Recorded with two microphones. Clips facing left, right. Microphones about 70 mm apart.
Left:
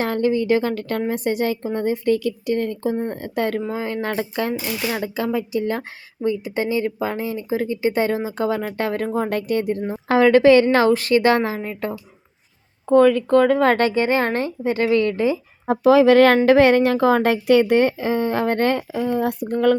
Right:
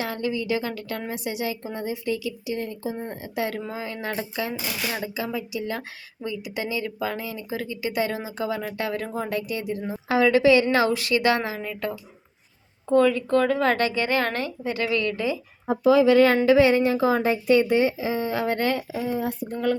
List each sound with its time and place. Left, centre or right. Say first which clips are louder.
0.0 s speech: left 8 dB; left
12.9 s speech: left 5 dB; left
15.6 s a woman's voice: left 4 dB; left